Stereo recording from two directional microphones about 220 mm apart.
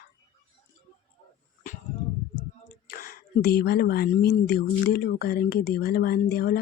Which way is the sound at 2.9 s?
40° left (ahead or behind).